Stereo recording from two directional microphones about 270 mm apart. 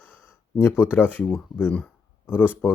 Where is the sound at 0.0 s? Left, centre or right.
Centre.